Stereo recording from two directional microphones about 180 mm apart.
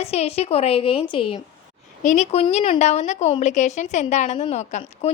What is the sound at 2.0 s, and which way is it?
A woman's voice, 40° left (ahead or behind).